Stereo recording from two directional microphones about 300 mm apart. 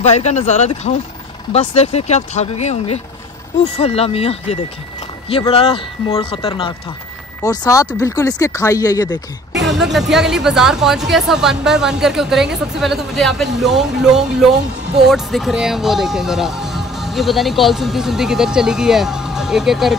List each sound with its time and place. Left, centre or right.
0.0 s speech: left
9.6 s speech: centre